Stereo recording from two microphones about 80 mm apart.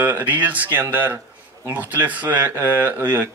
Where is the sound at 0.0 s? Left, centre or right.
Right.